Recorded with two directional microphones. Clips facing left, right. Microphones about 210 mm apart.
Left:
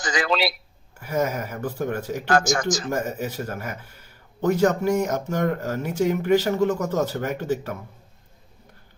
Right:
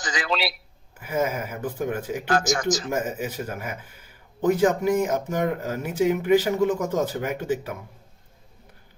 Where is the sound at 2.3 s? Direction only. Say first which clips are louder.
Left 2 dB; 50° left (ahead or behind).